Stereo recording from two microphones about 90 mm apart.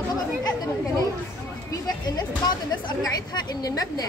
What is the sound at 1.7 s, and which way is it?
Speech, 50° left (ahead or behind).